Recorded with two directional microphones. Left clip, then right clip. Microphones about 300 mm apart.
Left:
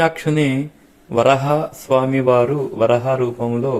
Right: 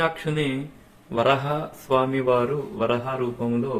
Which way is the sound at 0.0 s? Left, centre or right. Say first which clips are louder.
Left 7 dB; left.